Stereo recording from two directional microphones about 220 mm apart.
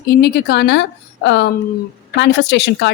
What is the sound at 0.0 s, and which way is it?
Speech, 45° left (ahead or behind).